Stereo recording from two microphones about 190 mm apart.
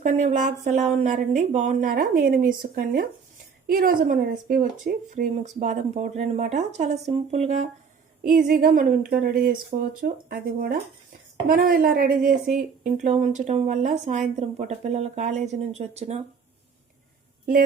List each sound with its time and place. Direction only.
0.0 s a woman's voice: 40° right (ahead or behind)
8.3 s a woman's voice: 45° right (ahead or behind)